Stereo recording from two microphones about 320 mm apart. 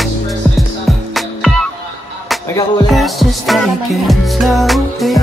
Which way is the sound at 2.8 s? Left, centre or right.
Centre.